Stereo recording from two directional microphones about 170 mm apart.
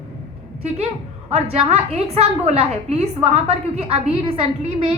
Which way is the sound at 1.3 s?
35° right (ahead or behind).